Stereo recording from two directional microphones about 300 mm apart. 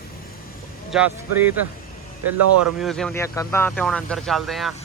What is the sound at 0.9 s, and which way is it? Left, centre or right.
Speech, centre.